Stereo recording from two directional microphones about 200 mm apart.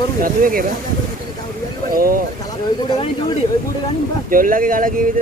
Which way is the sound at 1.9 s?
45° right (ahead or behind).